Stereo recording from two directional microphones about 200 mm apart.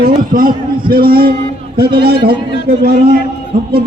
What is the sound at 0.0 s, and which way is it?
A man's voice, 45° right (ahead or behind).